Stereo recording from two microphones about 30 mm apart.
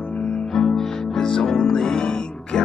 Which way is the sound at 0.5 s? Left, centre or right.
Centre.